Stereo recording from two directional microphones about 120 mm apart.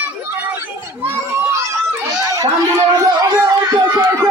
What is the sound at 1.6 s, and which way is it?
Chatter, 30° right (ahead or behind).